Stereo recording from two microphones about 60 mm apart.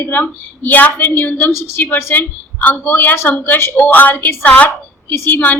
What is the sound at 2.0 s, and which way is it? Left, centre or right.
A woman's voice, left.